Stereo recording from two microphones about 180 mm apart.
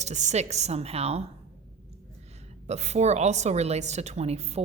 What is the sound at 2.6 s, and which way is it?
A woman's voice, 40° right (ahead or behind).